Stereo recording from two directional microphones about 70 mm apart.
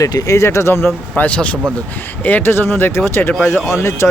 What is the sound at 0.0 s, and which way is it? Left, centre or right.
Speech, left.